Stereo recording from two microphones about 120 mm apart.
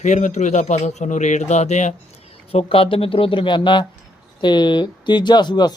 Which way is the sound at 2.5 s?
50° left (ahead or behind).